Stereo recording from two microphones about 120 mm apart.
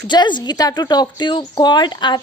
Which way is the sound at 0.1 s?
40° left (ahead or behind).